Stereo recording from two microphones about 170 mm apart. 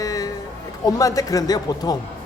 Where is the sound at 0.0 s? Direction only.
20° left (ahead or behind).